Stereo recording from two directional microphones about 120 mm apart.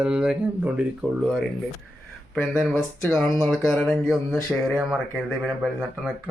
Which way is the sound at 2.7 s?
15° left (ahead or behind).